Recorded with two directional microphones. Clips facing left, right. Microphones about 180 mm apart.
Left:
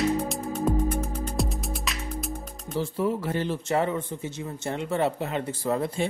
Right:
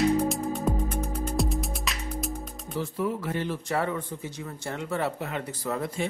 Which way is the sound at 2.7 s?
30° left (ahead or behind).